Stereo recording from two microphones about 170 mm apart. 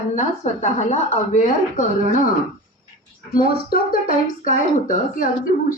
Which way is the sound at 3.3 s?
60° left (ahead or behind).